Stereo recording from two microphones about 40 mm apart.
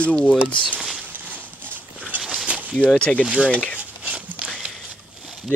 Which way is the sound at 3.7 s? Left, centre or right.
Right.